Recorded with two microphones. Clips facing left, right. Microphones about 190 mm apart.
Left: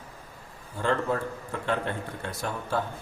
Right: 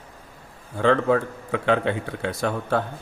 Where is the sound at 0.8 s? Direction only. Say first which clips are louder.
Right 8 dB; 80° right.